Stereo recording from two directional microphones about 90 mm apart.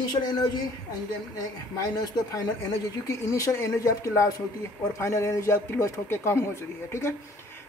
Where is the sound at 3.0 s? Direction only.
35° left (ahead or behind).